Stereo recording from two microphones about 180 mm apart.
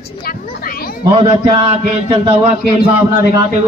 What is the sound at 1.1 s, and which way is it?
A man's voice, 30° right (ahead or behind).